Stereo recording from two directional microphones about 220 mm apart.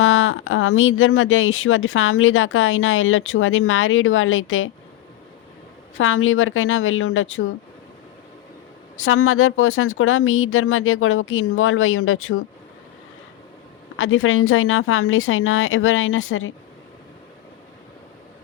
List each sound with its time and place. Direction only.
0.0 s speech: 65° left (ahead or behind)
6.0 s a woman's voice: 65° left (ahead or behind)
9.0 s speech: 65° left (ahead or behind)
13.9 s speech: 60° left (ahead or behind)